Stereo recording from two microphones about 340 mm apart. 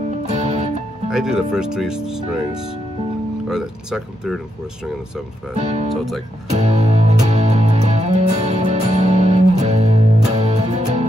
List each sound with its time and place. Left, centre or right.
0.3 s music: centre
1.1 s speech: centre
3.4 s speech: centre
5.6 s speech: centre
6.5 s music: centre